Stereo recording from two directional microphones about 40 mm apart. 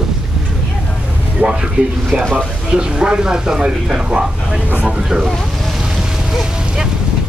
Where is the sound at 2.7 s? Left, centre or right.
Right.